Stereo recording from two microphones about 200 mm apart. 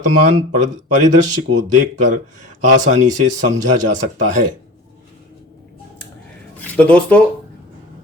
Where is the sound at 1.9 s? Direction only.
40° right (ahead or behind).